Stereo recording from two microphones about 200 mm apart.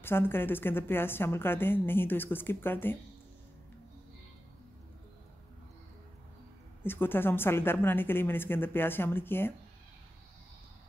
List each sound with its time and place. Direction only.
0.0 s a woman's voice: 10° left (ahead or behind)
6.8 s a woman's voice: 10° left (ahead or behind)